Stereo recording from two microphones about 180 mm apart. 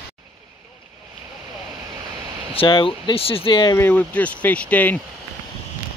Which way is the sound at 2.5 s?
30° left (ahead or behind).